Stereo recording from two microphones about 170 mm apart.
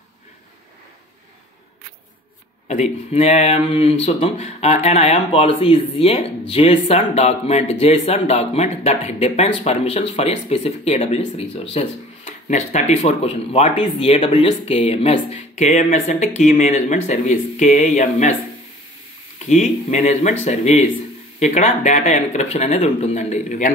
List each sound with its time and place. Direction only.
2.7 s speech: 40° left (ahead or behind)
19.4 s speech: 45° left (ahead or behind)